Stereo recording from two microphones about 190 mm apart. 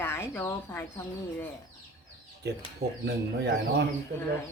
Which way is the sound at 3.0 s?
60° right (ahead or behind).